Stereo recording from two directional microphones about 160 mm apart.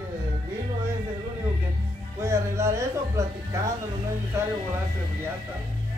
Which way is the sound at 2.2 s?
15° right (ahead or behind).